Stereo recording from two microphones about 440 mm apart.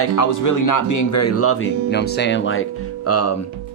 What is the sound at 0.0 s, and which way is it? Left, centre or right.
Speech, left.